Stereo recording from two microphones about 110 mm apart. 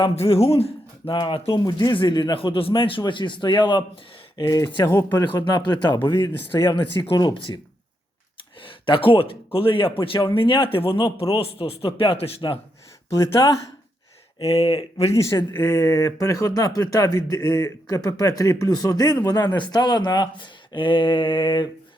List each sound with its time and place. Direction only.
0.2 s a man's voice: 65° left (ahead or behind); by 3.8 s 45° left (ahead or behind)
4.4 s speech: 35° left (ahead or behind)
5.4 s speech: 40° left (ahead or behind)
7.2 s speech: 40° left (ahead or behind)
8.6 s a man's voice: 55° left (ahead or behind)
13.4 s speech: 40° left (ahead or behind)
14.3 s a man's voice: 60° left (ahead or behind)
15.1 s speech: 30° left (ahead or behind); by 21.7 s 45° left (ahead or behind)